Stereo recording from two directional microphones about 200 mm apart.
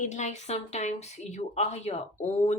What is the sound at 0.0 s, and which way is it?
Speech, 35° left (ahead or behind).